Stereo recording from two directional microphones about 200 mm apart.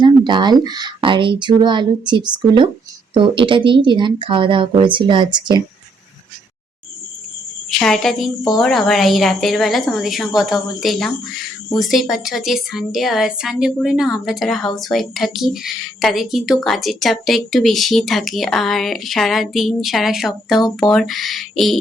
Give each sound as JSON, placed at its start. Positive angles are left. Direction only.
{"t": 0.0, "sound": "speech", "side_deg": -20}
{"t": 7.7, "sound": "a woman's voice", "side_deg": 0}